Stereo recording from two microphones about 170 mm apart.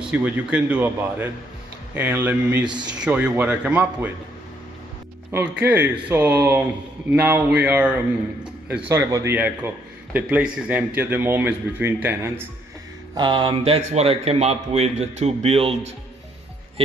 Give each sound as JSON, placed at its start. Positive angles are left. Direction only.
{"t": 0.0, "sound": "speech", "side_deg": -5}
{"t": 5.3, "sound": "speech", "side_deg": -10}
{"t": 13.1, "sound": "a man's voice", "side_deg": -25}